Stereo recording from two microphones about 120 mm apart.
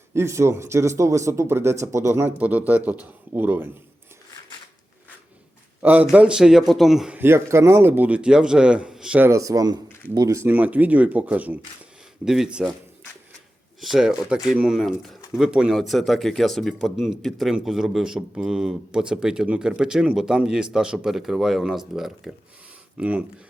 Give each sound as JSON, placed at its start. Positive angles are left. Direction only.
{"t": 0.1, "sound": "a man's voice", "side_deg": -25}
{"t": 5.8, "sound": "a man's voice", "side_deg": -15}
{"t": 7.2, "sound": "a man's voice", "side_deg": -20}
{"t": 9.2, "sound": "a man's voice", "side_deg": -25}
{"t": 13.8, "sound": "a man's voice", "side_deg": 0}